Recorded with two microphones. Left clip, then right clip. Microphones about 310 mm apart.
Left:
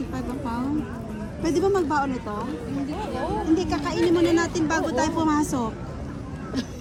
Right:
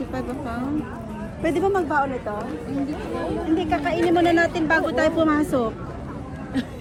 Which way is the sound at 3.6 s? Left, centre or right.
Centre.